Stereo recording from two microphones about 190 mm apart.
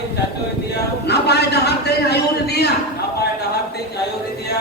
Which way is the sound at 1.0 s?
60° left (ahead or behind).